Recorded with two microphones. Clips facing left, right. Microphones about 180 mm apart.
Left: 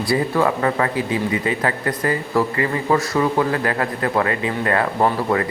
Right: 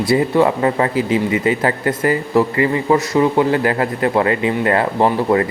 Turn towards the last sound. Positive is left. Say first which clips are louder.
# right 4 dB
turn(degrees=-25)  # may be behind; listen again after turning